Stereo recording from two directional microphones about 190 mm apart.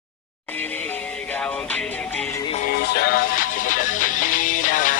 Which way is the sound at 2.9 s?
55° left (ahead or behind).